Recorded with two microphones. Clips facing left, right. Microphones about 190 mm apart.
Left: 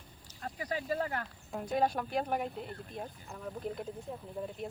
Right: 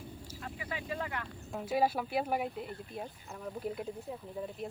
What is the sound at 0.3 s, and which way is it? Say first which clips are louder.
Speech: left 5 dB; 40° left (ahead or behind).